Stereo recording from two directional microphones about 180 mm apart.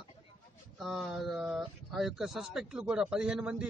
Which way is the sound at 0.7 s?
Centre (ahead or behind).